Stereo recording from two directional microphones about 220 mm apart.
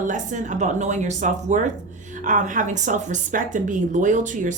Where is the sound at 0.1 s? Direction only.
35° right (ahead or behind).